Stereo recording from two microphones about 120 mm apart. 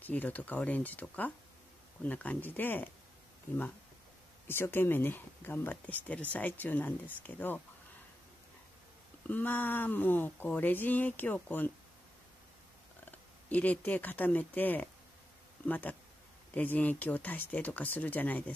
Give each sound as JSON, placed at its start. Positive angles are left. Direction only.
{"t": 0.0, "sound": "speech", "side_deg": 15}
{"t": 4.5, "sound": "speech", "side_deg": 20}
{"t": 9.3, "sound": "speech", "side_deg": 15}
{"t": 13.5, "sound": "speech", "side_deg": 10}